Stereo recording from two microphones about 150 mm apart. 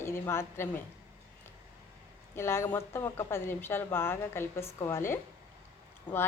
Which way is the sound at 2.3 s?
15° left (ahead or behind).